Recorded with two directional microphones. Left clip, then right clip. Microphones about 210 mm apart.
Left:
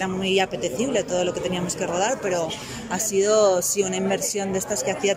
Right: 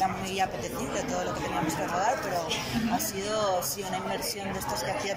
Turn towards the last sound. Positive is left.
turn(degrees=50)  # may be behind; listen again after turning